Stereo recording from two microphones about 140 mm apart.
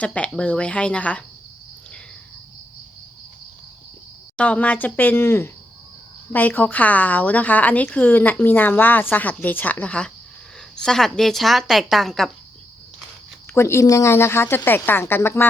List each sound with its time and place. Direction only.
0.0 s a woman's voice: 10° left (ahead or behind)
4.4 s a woman's voice: 10° left (ahead or behind)
13.5 s a woman's voice: 20° left (ahead or behind)